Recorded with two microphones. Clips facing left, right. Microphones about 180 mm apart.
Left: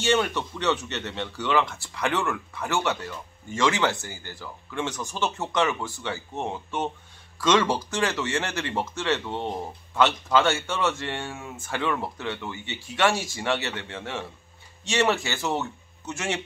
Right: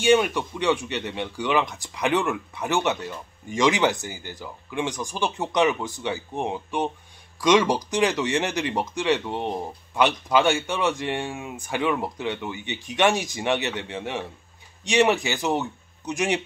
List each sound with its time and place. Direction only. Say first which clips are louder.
0.0 s speech: right 4 dB; 15° right (ahead or behind)